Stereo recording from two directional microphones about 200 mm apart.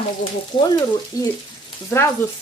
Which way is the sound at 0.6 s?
15° left (ahead or behind).